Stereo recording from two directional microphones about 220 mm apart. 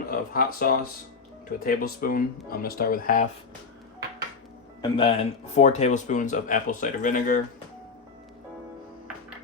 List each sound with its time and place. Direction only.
0.1 s speech: 40° left (ahead or behind)
4.8 s speech: 25° left (ahead or behind)